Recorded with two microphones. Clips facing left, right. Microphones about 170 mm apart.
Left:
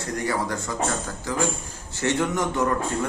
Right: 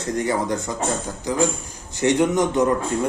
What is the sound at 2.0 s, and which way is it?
Speech, 20° right (ahead or behind).